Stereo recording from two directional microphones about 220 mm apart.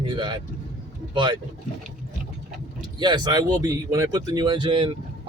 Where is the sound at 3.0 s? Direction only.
20° right (ahead or behind).